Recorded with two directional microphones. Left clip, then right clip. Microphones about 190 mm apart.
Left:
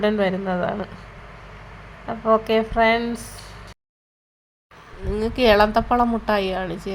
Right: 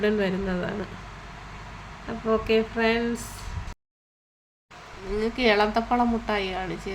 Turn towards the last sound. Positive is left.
turn(degrees=20)  # may be behind; listen again after turning